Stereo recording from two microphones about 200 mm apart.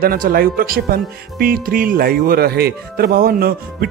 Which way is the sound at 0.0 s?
45° right (ahead or behind).